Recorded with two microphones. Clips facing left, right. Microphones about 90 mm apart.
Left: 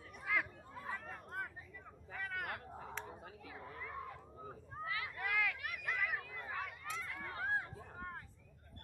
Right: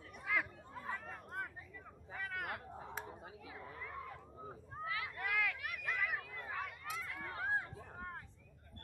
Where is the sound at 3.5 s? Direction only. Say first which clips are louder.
Left 1 dB; 50° left (ahead or behind).